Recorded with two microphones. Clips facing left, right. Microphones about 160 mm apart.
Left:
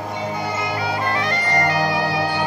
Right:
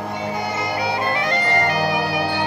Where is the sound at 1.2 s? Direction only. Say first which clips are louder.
Right 1 dB; 20° right (ahead or behind).